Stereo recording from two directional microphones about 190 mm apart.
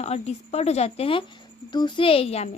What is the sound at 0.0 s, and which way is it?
A woman's voice, 35° left (ahead or behind).